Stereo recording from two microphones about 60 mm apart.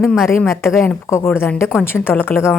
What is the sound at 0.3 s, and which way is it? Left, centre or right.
A woman's voice, left.